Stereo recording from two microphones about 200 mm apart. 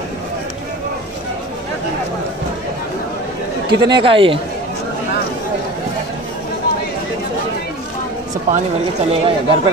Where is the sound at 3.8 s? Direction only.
25° right (ahead or behind).